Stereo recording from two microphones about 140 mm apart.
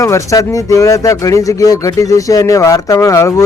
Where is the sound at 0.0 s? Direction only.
20° left (ahead or behind).